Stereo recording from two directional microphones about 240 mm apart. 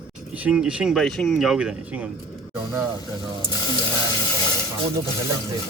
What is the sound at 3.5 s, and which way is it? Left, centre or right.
Speech, centre.